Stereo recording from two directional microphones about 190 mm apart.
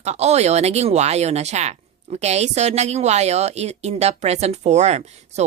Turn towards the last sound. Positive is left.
turn(degrees=-35)  # may be behind; listen again after turning